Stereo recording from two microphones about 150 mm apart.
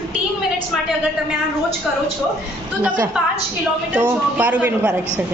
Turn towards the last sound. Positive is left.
turn(degrees=-10)  # may be behind; listen again after turning